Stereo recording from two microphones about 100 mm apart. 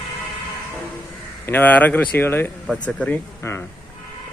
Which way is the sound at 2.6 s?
5° left (ahead or behind).